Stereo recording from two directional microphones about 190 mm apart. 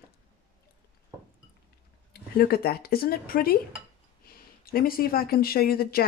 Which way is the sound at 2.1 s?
55° left (ahead or behind).